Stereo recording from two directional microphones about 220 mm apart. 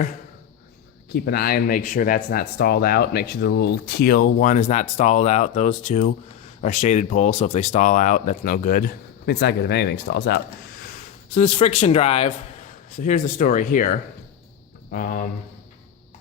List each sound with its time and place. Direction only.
1.1 s speech: 45° left (ahead or behind)